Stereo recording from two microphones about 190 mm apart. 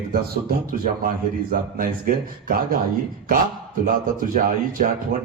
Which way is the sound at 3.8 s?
45° right (ahead or behind).